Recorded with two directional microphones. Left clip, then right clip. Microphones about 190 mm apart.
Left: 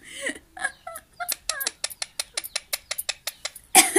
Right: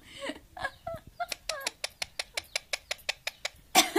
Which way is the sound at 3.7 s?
Centre (ahead or behind).